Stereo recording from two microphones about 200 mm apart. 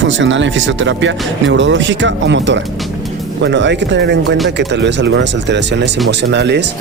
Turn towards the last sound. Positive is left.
turn(degrees=-60)  # may be behind; listen again after turning